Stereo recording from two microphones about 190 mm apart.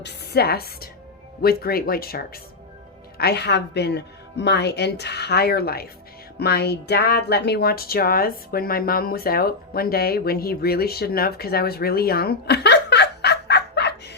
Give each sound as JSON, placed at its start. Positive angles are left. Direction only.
{"t": 0.0, "sound": "speech", "side_deg": 55}